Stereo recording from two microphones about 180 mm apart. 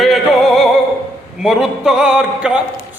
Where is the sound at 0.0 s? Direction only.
Centre (ahead or behind).